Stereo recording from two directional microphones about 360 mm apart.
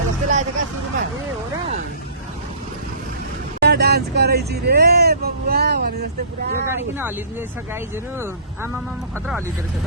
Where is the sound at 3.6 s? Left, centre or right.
Right.